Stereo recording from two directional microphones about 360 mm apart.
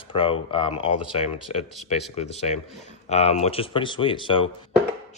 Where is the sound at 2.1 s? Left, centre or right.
Centre.